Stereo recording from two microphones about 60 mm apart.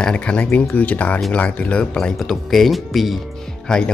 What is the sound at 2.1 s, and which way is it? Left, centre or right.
Speech, centre.